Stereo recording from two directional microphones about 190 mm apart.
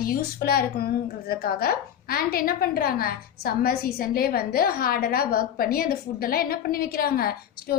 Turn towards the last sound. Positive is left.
turn(degrees=55)  # may be behind; listen again after turning